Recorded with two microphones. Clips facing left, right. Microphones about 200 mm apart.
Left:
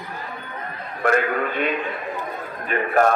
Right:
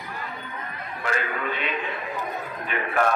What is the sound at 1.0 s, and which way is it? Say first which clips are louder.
A man's voice: left 8 dB; 55° left (ahead or behind).